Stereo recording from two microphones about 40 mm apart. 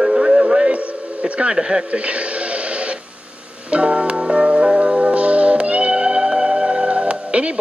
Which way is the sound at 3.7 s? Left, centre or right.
Right.